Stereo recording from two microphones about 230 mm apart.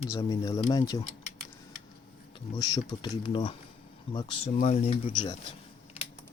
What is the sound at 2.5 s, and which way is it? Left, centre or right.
Speech, centre.